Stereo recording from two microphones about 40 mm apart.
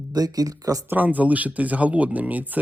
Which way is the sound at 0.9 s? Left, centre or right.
Right.